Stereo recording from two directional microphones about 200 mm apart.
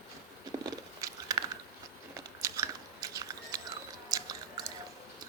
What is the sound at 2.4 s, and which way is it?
Biting, 15° right (ahead or behind).